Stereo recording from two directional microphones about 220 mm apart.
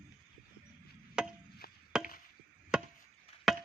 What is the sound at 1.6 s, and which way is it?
Chopping, 45° left (ahead or behind).